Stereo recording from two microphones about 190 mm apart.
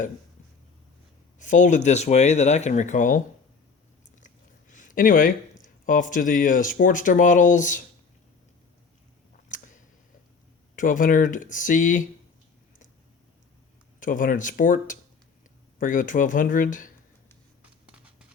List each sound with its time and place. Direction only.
1.4 s speech: 40° left (ahead or behind)
4.7 s speech: 45° left (ahead or behind)
9.5 s a sound: 40° left (ahead or behind)
10.8 s speech: 45° left (ahead or behind)
14.0 s speech: 45° left (ahead or behind)
17.6 s writing: 5° right (ahead or behind)